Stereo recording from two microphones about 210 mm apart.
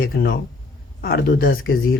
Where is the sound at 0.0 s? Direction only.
45° left (ahead or behind).